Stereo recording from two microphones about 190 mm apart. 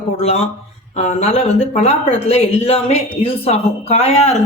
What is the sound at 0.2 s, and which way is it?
Speech, 35° left (ahead or behind).